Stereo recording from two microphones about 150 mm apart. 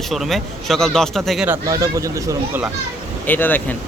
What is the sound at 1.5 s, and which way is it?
Speech, 20° right (ahead or behind).